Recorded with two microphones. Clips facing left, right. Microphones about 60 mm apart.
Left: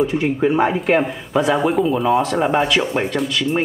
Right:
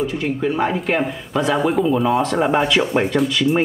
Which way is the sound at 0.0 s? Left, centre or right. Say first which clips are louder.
Left 3 dB; left.